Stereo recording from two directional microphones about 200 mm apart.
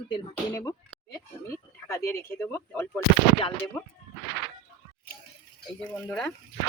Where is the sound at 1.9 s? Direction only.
15° left (ahead or behind).